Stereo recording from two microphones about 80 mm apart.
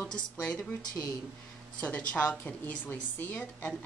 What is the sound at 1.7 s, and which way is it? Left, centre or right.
A woman's voice, centre.